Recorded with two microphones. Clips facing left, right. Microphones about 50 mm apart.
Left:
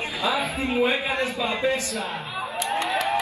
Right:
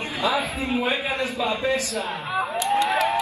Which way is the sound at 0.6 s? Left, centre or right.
Left.